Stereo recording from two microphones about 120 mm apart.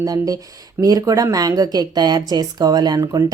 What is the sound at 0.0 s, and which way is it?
Speech, 30° right (ahead or behind).